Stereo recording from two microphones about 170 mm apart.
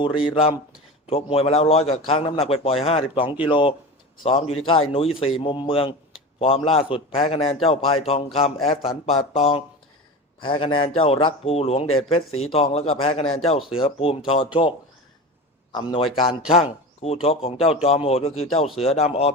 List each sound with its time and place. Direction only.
0.0 s a man's voice: 30° left (ahead or behind)
15.7 s a man's voice: 30° left (ahead or behind)